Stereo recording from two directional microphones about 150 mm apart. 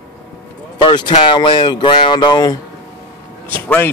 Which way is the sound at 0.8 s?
35° left (ahead or behind).